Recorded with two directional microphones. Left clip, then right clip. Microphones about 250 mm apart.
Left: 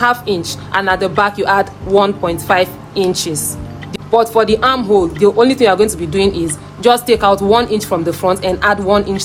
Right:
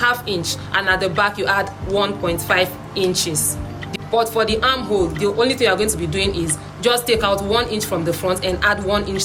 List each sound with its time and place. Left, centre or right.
0.0 s speech: centre